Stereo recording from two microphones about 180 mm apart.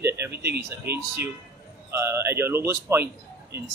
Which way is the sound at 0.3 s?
65° right (ahead or behind).